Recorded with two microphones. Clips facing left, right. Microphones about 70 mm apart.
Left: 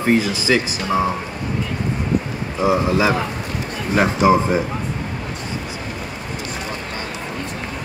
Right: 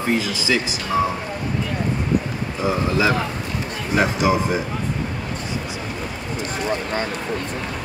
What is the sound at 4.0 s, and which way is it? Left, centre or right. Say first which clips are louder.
Speech: left 4 dB; left.